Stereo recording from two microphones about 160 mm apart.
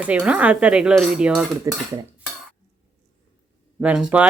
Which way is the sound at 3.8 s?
5° right (ahead or behind).